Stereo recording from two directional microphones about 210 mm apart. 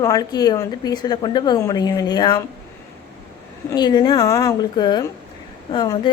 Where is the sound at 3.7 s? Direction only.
20° left (ahead or behind).